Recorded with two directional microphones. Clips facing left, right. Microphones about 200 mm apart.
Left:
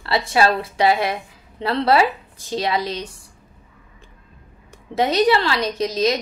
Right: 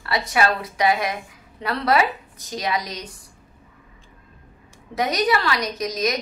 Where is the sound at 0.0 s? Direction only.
25° left (ahead or behind).